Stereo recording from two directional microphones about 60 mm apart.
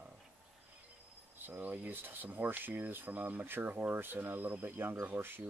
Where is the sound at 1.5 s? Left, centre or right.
Right.